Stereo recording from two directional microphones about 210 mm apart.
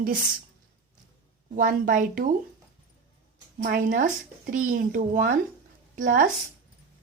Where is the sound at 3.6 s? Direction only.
40° right (ahead or behind).